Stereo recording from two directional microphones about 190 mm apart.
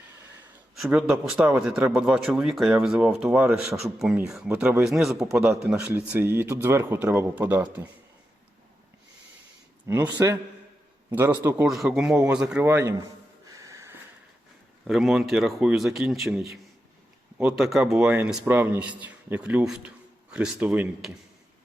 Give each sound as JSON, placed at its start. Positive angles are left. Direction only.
{"t": 0.8, "sound": "a man's voice", "side_deg": -5}
{"t": 9.8, "sound": "a man's voice", "side_deg": -15}
{"t": 13.5, "sound": "a sound", "side_deg": -15}
{"t": 14.8, "sound": "speech", "side_deg": 0}
{"t": 17.6, "sound": "a man's voice", "side_deg": 0}